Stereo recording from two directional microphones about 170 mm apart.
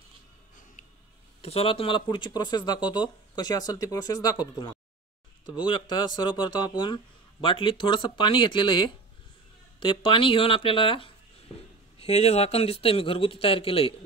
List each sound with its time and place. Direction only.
1.4 s a man's voice: 35° left (ahead or behind)
5.6 s a man's voice: 25° left (ahead or behind)